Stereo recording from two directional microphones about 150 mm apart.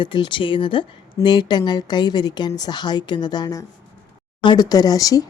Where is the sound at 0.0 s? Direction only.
30° left (ahead or behind).